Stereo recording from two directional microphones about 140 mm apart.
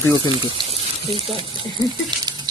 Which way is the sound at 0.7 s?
45° right (ahead or behind).